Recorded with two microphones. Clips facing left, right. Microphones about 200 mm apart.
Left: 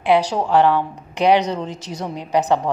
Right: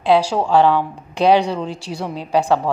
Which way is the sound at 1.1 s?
15° left (ahead or behind).